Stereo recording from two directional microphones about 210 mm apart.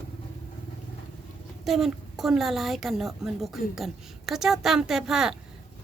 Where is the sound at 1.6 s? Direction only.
Centre (ahead or behind).